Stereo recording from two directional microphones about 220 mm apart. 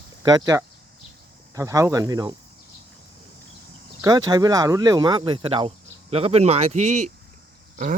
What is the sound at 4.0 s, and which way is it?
Speech, 15° right (ahead or behind).